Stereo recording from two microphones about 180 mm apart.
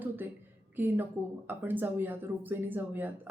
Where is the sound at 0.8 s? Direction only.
10° right (ahead or behind).